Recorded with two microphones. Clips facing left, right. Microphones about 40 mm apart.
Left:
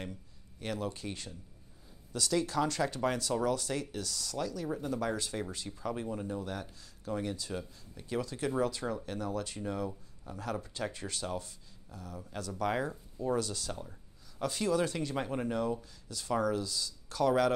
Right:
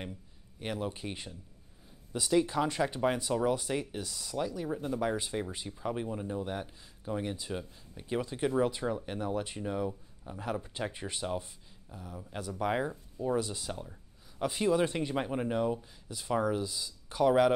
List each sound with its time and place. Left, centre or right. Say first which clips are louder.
0.0 s a man's voice: even; centre